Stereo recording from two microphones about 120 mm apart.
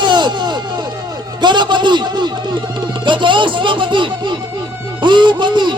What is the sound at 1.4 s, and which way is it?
A man's voice, 40° right (ahead or behind).